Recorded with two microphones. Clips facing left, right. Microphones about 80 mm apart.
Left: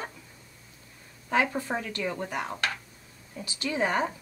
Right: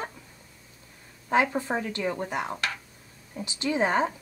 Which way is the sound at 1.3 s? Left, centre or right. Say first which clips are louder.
Right 2 dB; right.